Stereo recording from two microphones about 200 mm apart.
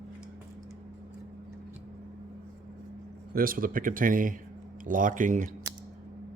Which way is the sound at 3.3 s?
45° right (ahead or behind).